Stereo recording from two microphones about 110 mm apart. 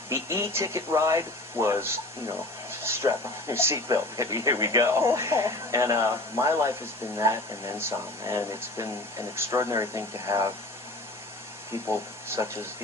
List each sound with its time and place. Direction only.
0.1 s speech: 25° right (ahead or behind)
11.9 s speech: 20° right (ahead or behind)